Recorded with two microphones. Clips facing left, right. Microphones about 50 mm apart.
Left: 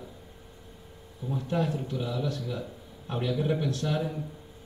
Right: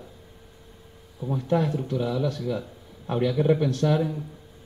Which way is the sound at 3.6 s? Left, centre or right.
Right.